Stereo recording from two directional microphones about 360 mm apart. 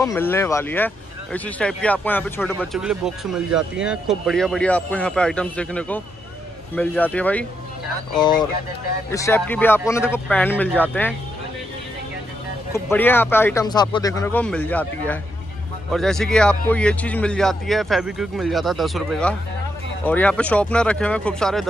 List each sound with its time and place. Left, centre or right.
0.0 s speech: centre
12.7 s speech: centre